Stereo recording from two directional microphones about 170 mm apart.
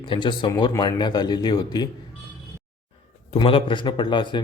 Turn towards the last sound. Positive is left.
turn(degrees=30)  # may be behind; listen again after turning